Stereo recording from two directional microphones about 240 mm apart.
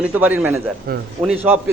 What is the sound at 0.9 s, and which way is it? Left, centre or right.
Speech, right.